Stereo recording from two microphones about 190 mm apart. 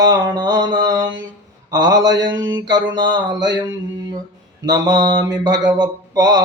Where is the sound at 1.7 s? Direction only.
20° right (ahead or behind).